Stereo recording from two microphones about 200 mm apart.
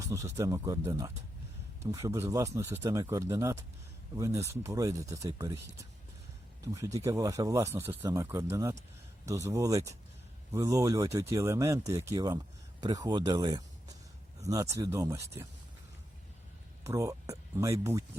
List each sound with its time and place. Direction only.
0.0 s speech: 15° right (ahead or behind)
16.8 s speech: 15° right (ahead or behind)